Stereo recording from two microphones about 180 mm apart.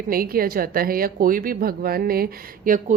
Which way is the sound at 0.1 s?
55° right (ahead or behind).